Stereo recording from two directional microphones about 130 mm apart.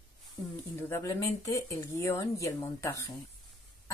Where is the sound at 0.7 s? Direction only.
20° left (ahead or behind).